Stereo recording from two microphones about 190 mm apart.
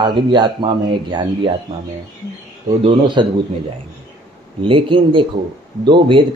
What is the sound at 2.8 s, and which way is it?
Speech, 25° right (ahead or behind).